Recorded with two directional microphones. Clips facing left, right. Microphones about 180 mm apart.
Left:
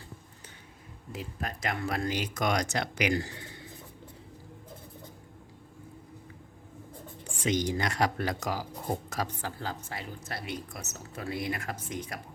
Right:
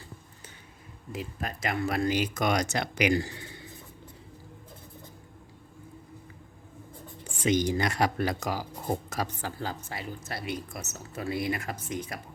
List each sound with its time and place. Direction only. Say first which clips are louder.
1.1 s speech: right 2 dB; 5° right (ahead or behind)
7.4 s speech: right 3 dB; 5° right (ahead or behind)